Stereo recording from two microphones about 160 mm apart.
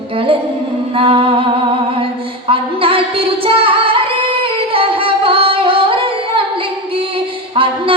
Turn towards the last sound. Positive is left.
turn(degrees=-35)  # may be behind; listen again after turning